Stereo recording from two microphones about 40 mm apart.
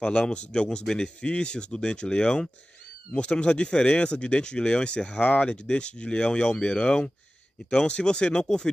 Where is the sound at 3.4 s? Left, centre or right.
Left.